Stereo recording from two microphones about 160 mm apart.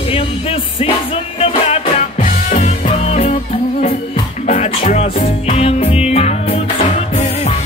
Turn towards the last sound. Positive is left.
turn(degrees=45)  # may be behind; listen again after turning